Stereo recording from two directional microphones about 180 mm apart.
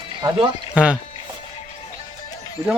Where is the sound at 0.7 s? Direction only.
5° right (ahead or behind).